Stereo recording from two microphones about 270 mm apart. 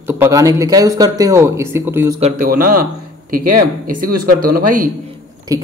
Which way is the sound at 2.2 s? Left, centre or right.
Right.